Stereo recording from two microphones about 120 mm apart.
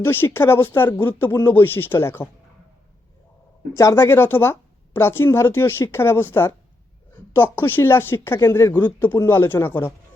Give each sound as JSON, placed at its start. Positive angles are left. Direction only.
{"t": 0.0, "sound": "speech", "side_deg": 20}
{"t": 3.8, "sound": "speech", "side_deg": 25}